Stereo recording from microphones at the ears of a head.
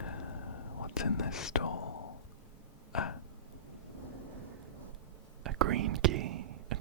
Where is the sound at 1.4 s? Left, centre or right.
Left.